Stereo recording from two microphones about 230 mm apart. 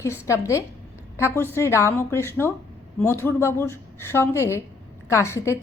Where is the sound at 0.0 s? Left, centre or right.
Centre.